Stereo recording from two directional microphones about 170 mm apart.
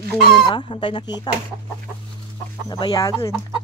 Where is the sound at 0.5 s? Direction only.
30° left (ahead or behind).